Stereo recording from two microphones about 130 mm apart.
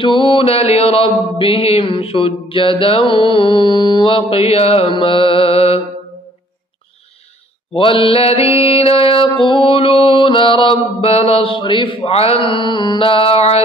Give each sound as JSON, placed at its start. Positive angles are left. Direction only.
{"t": 0.0, "sound": "mantra", "side_deg": 40}
{"t": 7.7, "sound": "mantra", "side_deg": 45}